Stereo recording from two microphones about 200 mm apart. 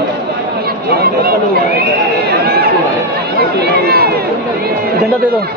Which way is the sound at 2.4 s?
50° right (ahead or behind).